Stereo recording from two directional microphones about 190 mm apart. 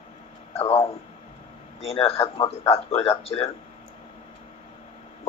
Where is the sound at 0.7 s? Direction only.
30° left (ahead or behind).